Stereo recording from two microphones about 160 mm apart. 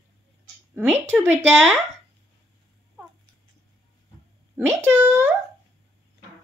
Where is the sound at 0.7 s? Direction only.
5° right (ahead or behind).